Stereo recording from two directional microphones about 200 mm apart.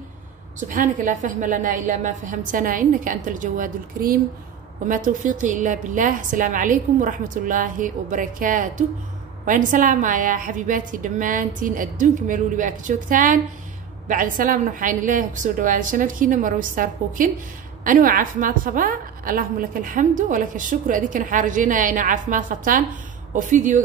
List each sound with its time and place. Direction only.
0.6 s a woman's voice: 40° right (ahead or behind)